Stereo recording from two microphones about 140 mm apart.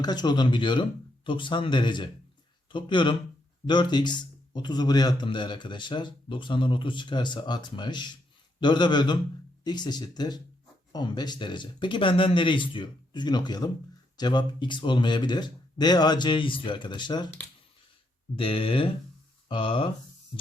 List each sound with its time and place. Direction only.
0.0 s a man's voice: 30° left (ahead or behind)
18.3 s a man's voice: 40° left (ahead or behind)